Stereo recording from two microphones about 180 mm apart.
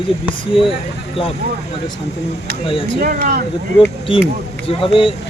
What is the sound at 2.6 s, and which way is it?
Speech, 30° left (ahead or behind).